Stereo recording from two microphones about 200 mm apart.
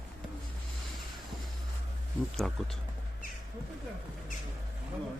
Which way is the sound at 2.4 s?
Centre (ahead or behind).